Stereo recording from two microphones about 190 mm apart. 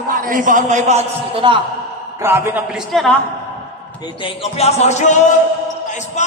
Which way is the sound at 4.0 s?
25° left (ahead or behind).